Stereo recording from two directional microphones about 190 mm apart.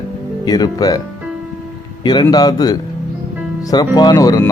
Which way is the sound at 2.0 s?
20° left (ahead or behind).